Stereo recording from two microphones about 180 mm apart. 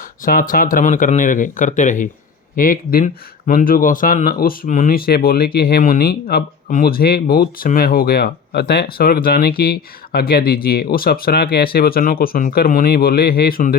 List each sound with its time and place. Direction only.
0.3 s speech: 55° left (ahead or behind)